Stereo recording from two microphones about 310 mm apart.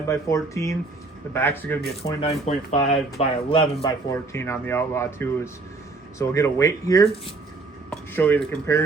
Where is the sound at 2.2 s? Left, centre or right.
Left.